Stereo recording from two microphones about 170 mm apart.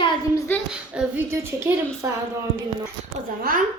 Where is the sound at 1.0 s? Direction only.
10° right (ahead or behind).